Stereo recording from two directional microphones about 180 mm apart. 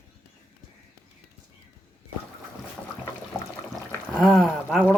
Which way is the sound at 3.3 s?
10° left (ahead or behind).